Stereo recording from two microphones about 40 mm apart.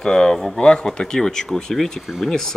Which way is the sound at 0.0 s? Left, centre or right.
Centre.